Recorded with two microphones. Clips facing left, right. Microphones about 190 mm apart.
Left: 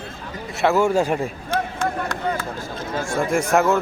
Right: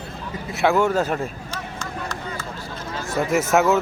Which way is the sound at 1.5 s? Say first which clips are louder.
Left 9 dB; 55° left (ahead or behind).